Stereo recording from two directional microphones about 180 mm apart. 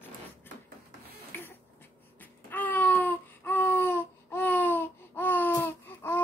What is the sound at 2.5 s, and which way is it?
Baby cry, 10° left (ahead or behind).